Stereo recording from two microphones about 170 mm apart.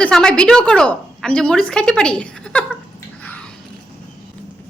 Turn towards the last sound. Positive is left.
turn(degrees=10)  # may be behind; listen again after turning